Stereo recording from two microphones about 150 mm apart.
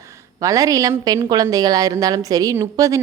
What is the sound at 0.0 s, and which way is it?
A woman's voice, 20° right (ahead or behind).